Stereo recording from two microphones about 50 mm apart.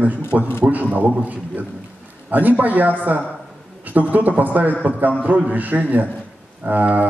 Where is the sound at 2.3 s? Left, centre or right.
Right.